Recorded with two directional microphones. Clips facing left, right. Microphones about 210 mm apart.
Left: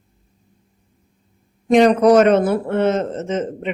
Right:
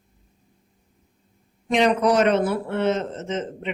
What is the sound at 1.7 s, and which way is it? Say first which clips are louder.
Speech: left 7 dB; 45° left (ahead or behind).